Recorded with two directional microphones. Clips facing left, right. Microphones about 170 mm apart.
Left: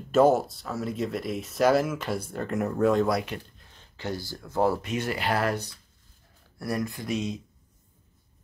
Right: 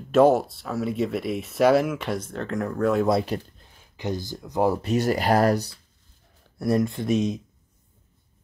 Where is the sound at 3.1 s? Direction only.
30° right (ahead or behind).